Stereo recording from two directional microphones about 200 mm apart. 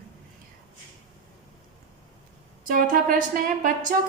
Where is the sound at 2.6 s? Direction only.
45° right (ahead or behind).